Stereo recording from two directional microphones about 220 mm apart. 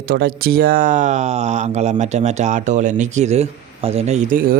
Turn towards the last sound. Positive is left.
turn(degrees=-40)  # may be behind; listen again after turning